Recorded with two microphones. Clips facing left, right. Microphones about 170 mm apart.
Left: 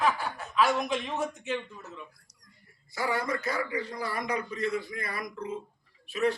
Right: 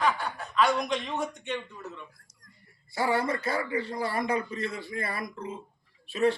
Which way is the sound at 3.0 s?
30° right (ahead or behind).